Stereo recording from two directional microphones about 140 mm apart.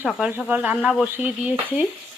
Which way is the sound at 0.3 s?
10° right (ahead or behind).